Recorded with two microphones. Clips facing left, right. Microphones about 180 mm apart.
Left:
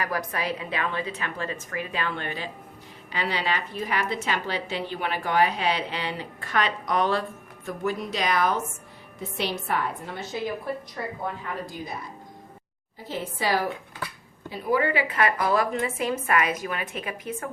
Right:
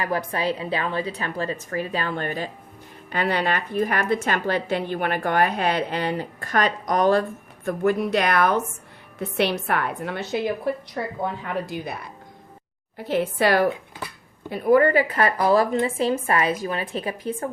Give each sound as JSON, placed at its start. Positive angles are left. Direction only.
{"t": 0.0, "sound": "a woman's voice", "side_deg": -30}
{"t": 11.4, "sound": "a woman's voice", "side_deg": -70}
{"t": 13.0, "sound": "a woman's voice", "side_deg": -65}